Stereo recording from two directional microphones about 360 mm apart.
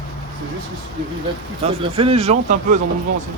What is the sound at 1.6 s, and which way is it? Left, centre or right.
Speech, centre.